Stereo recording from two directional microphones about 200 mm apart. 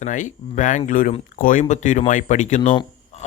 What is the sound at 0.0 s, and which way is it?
Speech, 40° left (ahead or behind).